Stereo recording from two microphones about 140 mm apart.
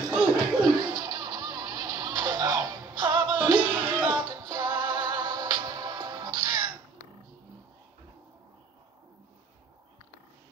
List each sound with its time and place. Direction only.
0.1 s music: centre (ahead or behind)
0.7 s music: 30° right (ahead or behind)